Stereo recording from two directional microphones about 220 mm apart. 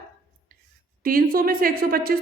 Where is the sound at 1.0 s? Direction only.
40° right (ahead or behind).